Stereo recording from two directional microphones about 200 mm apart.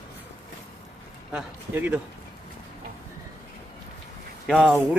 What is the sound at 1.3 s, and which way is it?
Speech, 10° right (ahead or behind).